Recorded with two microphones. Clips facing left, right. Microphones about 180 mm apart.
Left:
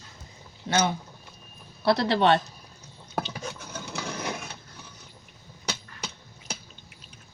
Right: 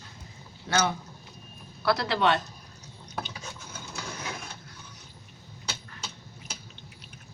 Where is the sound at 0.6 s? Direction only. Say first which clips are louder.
Left 2 dB; 20° left (ahead or behind).